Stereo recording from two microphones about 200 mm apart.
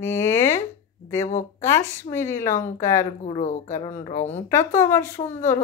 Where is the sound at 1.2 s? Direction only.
35° left (ahead or behind).